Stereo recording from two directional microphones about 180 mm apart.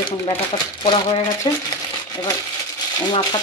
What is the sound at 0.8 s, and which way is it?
Speech, 20° left (ahead or behind).